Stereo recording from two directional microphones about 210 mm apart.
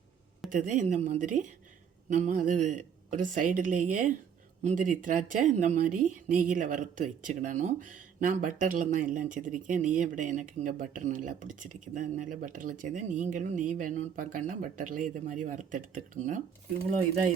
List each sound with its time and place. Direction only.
0.5 s speech: 40° right (ahead or behind)